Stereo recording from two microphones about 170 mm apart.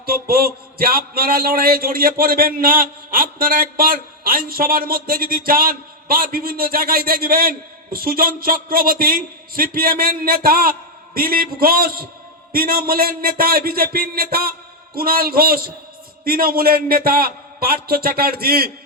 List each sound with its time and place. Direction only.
0.0 s a man's voice: 60° right (ahead or behind)